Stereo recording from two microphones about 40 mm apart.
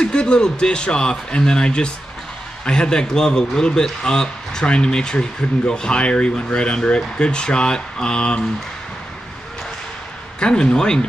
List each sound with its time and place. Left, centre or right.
0.0 s speech: left
10.4 s speech: left